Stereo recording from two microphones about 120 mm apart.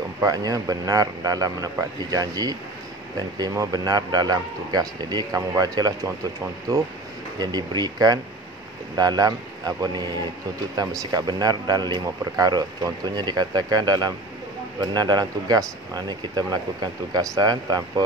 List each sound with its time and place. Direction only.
0.2 s speech: 30° right (ahead or behind)